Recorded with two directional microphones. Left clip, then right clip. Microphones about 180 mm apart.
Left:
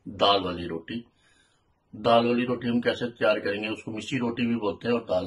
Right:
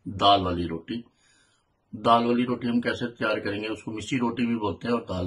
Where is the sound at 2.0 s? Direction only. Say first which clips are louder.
Even; centre (ahead or behind).